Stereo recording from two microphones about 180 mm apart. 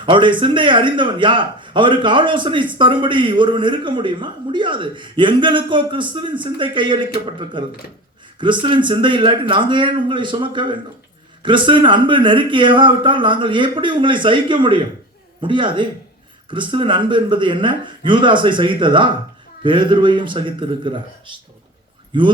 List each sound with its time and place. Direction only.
0.0 s speech: 25° right (ahead or behind)